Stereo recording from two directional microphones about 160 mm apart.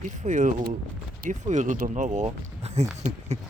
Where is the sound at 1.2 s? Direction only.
50° right (ahead or behind).